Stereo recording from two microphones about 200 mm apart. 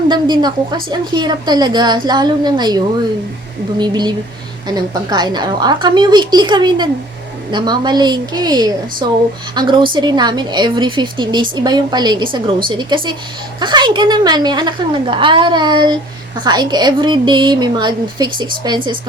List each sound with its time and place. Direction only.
0.1 s a woman's voice: 20° right (ahead or behind)